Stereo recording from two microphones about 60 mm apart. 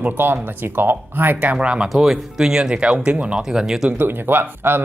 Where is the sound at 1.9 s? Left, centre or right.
Centre.